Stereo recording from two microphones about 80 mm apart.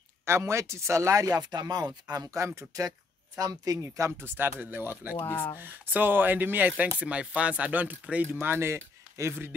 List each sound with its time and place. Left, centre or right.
0.2 s speech: right
4.4 s speech: right